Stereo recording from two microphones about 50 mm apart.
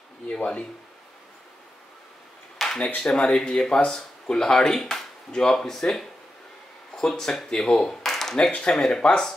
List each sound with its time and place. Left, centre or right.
2.6 s a sound: centre
3.0 s speech: centre
8.4 s speech: centre